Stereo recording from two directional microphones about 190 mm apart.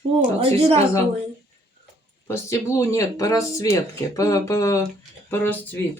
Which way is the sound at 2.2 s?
15° left (ahead or behind).